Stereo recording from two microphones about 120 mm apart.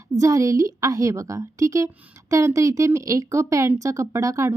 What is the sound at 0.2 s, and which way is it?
Speech, 30° right (ahead or behind).